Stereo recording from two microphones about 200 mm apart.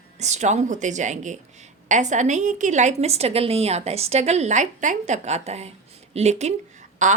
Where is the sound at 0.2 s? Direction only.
35° right (ahead or behind).